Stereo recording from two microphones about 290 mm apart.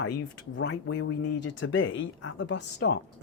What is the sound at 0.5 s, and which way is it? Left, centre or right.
Speech, left.